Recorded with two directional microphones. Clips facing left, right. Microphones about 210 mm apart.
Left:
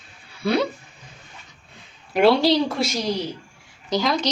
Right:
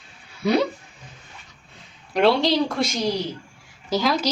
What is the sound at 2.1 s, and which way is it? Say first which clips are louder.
Speech: left 2 dB; 5° left (ahead or behind).